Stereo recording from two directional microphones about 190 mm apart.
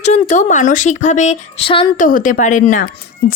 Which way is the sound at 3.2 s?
55° left (ahead or behind).